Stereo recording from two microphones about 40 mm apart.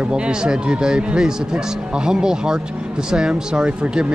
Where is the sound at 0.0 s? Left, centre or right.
Right.